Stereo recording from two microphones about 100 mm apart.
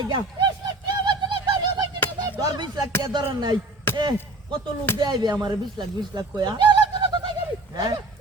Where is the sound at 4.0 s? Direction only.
50° right (ahead or behind).